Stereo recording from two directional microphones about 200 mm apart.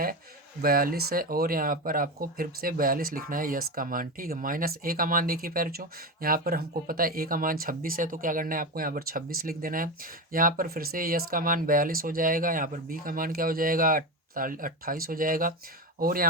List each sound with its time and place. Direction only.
0.6 s speech: 45° right (ahead or behind)